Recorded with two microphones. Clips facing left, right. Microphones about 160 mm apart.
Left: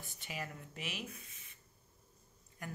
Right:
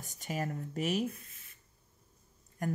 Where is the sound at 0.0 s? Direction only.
40° right (ahead or behind).